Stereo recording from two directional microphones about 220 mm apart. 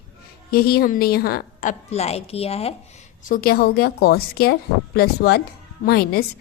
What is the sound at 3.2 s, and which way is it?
A woman's voice, 40° left (ahead or behind).